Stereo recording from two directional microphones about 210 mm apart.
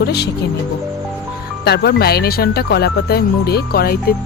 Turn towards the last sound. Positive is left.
turn(degrees=45)  # may be behind; listen again after turning